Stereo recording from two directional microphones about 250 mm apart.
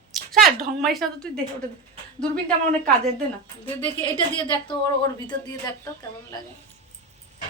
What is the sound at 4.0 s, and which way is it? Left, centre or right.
A woman's voice, centre.